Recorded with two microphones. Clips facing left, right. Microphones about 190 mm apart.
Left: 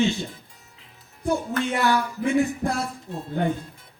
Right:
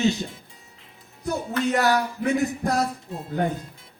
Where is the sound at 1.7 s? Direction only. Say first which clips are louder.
Right 1 dB; 40° right (ahead or behind).